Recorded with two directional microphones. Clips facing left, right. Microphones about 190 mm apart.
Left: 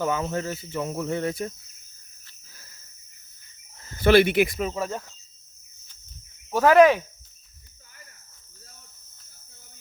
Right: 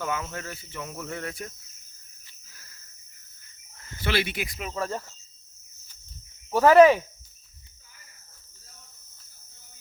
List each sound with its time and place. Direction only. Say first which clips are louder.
0.0 s cricket: left 6 dB; 30° left (ahead or behind)
3.8 s speech: left 11 dB; 40° left (ahead or behind); by 4.6 s 60° left (ahead or behind)
4.8 s cricket: left 1 dB; centre (ahead or behind)
6.7 s speech: right 1 dB; 5° right (ahead or behind)